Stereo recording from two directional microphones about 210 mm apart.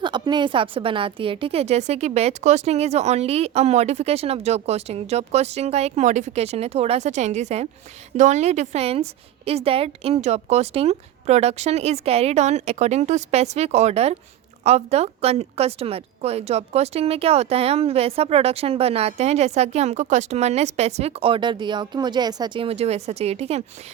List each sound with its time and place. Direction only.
0.0 s a woman's voice: 20° right (ahead or behind)